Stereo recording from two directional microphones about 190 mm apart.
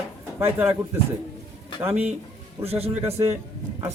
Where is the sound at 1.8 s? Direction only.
10° right (ahead or behind).